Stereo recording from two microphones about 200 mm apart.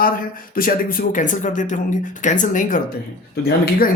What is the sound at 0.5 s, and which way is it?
Speech, 45° left (ahead or behind).